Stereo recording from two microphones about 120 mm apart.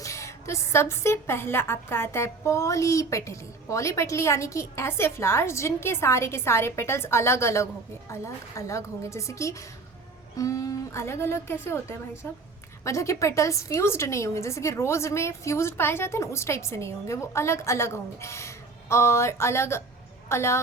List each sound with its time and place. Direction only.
0.0 s a woman's voice: 25° left (ahead or behind)